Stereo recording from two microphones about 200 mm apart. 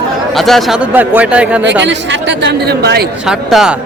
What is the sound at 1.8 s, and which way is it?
A woman's voice, 65° right (ahead or behind).